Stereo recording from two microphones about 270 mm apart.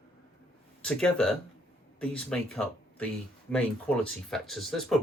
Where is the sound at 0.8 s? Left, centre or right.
Centre.